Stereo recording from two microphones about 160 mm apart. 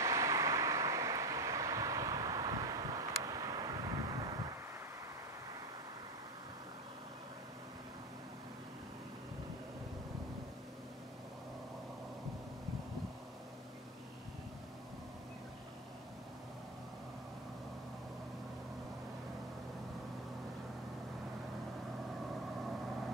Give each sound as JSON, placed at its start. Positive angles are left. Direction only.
{"t": 0.0, "sound": "vehicle", "side_deg": -20}